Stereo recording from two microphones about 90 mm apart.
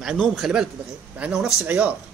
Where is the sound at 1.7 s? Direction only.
15° right (ahead or behind).